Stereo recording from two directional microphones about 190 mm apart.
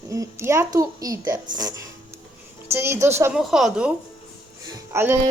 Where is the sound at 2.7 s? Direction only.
15° right (ahead or behind).